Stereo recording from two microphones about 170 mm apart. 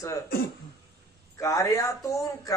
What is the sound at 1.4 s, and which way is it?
A man's voice, 20° left (ahead or behind).